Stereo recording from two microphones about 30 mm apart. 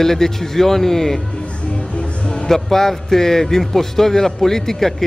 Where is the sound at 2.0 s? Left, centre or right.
Left.